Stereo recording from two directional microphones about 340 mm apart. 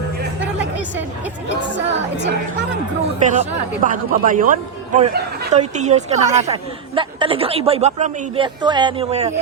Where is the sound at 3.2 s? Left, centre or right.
Right.